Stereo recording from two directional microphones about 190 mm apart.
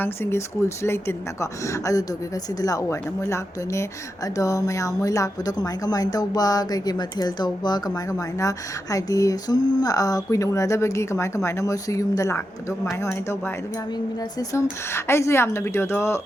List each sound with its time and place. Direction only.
0.0 s speech: 15° left (ahead or behind)